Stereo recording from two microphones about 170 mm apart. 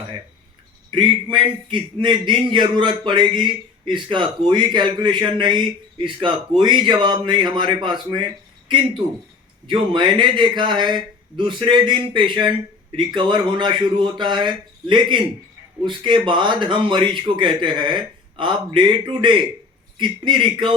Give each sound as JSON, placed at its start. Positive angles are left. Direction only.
{"t": 0.9, "sound": "a man's voice", "side_deg": -30}
{"t": 9.6, "sound": "a man's voice", "side_deg": -25}